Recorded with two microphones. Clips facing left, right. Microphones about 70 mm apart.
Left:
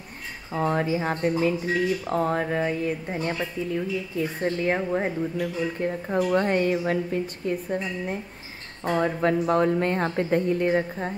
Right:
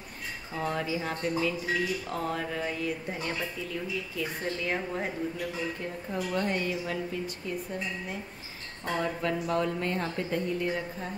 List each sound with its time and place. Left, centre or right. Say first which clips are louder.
0.5 s speech: left 7 dB; left
6.0 s a woman's voice: left 7 dB; left